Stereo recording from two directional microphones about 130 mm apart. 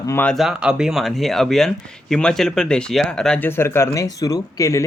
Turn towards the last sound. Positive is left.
turn(degrees=25)  # may be behind; listen again after turning